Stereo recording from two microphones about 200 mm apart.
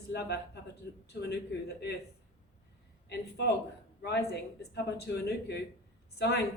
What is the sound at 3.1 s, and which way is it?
Speech, 60° left (ahead or behind).